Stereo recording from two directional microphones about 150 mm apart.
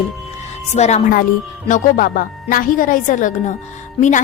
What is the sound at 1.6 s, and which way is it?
A woman's voice, 60° left (ahead or behind).